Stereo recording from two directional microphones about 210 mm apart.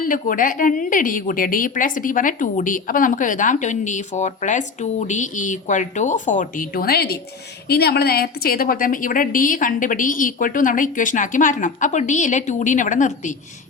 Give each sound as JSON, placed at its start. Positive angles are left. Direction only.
{"t": 0.0, "sound": "a woman's voice", "side_deg": 40}